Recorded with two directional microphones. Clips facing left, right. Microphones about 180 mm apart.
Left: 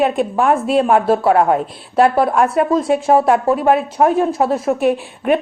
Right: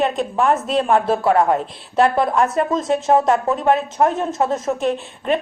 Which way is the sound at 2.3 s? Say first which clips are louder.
Left 3 dB; 55° left (ahead or behind).